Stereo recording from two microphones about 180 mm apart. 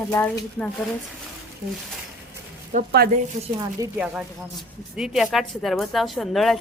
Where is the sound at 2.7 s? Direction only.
60° right (ahead or behind).